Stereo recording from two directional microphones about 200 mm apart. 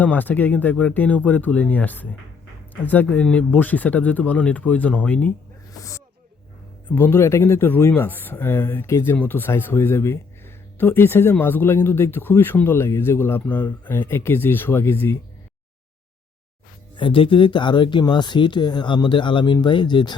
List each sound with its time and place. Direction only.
0.0 s speech: 10° left (ahead or behind)
6.9 s speech: 10° left (ahead or behind)
17.0 s speech: 25° left (ahead or behind)